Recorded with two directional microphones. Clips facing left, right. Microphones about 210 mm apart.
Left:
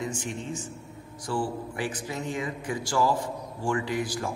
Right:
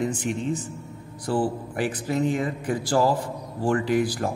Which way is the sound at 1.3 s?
35° right (ahead or behind).